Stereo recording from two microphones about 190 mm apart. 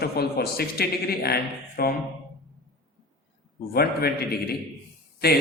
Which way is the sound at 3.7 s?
55° left (ahead or behind).